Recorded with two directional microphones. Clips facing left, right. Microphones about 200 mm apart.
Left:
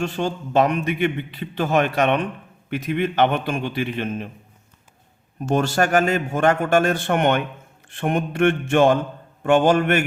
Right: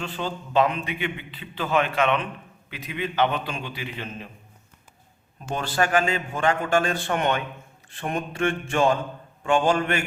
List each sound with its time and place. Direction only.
0.0 s a man's voice: 45° left (ahead or behind)
5.5 s a man's voice: 45° left (ahead or behind)
6.0 s mantra: 65° left (ahead or behind)